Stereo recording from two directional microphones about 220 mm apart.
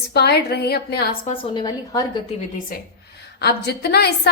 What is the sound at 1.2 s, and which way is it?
A woman's voice, 25° left (ahead or behind).